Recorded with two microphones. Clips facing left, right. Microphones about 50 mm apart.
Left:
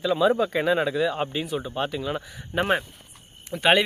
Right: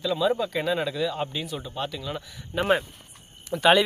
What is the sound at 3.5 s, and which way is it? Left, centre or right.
Speech, left.